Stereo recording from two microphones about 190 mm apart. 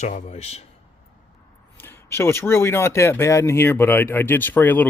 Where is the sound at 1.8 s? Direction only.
10° left (ahead or behind).